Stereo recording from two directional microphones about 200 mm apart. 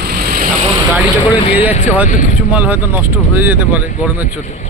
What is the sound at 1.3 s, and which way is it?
Speech, 30° left (ahead or behind).